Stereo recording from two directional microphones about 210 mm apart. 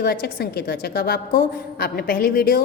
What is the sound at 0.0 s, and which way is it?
A woman's voice, 50° left (ahead or behind).